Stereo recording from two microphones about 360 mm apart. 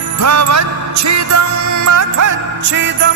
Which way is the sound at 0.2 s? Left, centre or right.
Right.